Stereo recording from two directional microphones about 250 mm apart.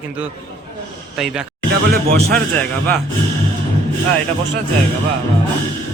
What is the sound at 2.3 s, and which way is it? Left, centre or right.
Speech, centre.